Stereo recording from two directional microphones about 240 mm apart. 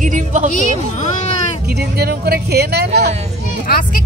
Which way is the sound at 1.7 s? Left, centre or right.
Right.